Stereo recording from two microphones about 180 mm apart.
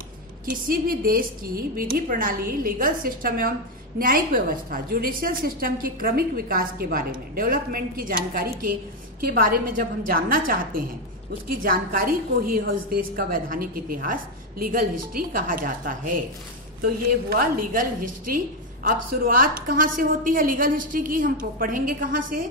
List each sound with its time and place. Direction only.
0.5 s a woman's voice: 55° right (ahead or behind)
17.3 s a woman's voice: 50° right (ahead or behind)